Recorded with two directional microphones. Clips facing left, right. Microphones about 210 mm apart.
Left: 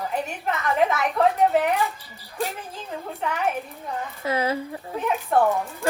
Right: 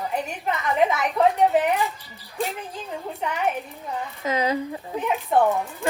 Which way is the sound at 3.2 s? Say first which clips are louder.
Even; centre (ahead or behind).